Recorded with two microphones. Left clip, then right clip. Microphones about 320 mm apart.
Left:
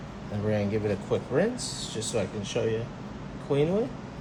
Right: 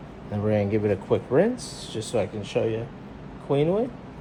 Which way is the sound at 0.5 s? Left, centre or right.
Right.